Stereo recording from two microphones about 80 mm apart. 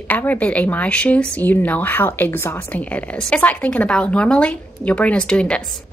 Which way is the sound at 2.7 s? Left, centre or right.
Centre.